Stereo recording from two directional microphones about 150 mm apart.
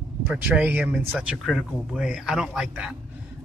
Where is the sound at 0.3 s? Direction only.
10° right (ahead or behind).